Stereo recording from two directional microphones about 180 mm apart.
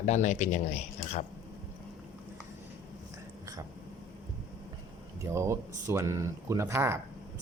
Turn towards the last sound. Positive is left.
turn(degrees=-15)  # may be behind; listen again after turning